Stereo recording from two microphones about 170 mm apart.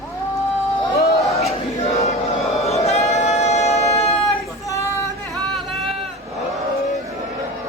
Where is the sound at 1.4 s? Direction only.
35° left (ahead or behind).